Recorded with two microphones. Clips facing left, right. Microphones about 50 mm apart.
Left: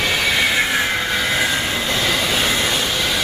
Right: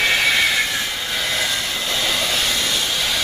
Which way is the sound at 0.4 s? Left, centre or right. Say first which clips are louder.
Left 1 dB; centre.